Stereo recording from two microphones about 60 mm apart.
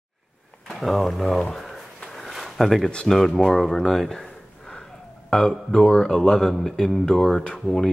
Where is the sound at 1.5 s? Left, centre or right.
Centre.